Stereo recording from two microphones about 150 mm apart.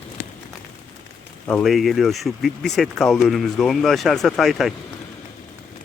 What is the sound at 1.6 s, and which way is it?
Speech, centre (ahead or behind).